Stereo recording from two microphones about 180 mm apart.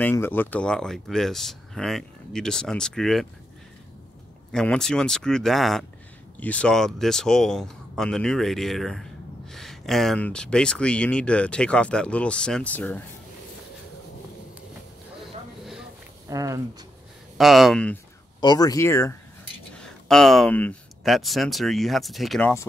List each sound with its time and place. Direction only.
0.0 s speech: 10° left (ahead or behind)
4.5 s speech: 5° left (ahead or behind)
15.2 s a sound: centre (ahead or behind)
16.3 s speech: 20° right (ahead or behind)
17.4 s speech: centre (ahead or behind)
18.4 s speech: 20° left (ahead or behind)
19.7 s speech: 5° left (ahead or behind)